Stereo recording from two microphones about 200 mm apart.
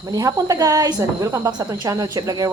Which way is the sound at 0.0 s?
20° right (ahead or behind).